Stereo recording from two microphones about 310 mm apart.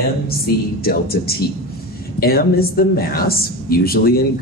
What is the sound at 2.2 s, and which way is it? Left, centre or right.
Speech, left.